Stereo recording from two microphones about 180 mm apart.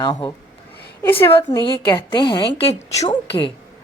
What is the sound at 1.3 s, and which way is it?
A woman's voice, 30° left (ahead or behind).